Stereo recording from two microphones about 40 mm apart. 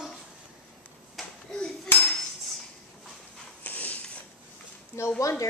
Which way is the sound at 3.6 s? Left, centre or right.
Left.